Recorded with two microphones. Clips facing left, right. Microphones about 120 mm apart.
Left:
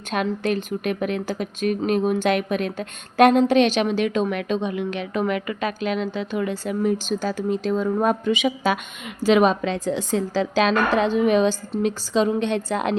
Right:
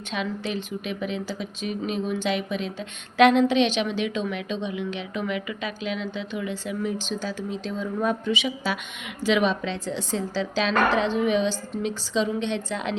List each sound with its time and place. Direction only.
0.1 s a woman's voice: 50° left (ahead or behind)